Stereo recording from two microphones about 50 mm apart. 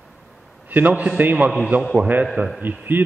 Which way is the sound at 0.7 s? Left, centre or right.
Right.